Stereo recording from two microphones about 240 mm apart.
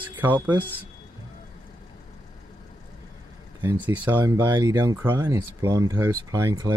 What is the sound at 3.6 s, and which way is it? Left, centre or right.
Speech, centre.